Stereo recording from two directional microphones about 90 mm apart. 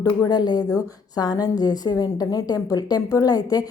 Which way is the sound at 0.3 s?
50° left (ahead or behind).